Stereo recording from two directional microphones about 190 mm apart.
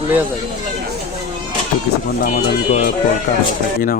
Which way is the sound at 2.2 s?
50° left (ahead or behind).